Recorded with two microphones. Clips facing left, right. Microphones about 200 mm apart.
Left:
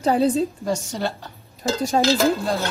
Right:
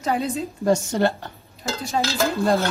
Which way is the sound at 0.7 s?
50° right (ahead or behind).